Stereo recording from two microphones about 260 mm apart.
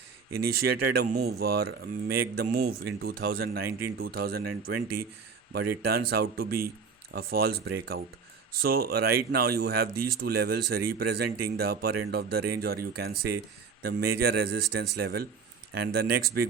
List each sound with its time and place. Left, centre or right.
0.3 s speech: right
0.6 s speech: right